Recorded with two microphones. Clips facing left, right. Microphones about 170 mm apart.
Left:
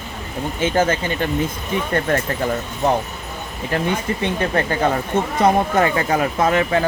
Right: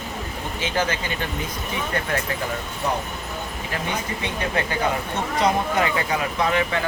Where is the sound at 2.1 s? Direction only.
50° left (ahead or behind).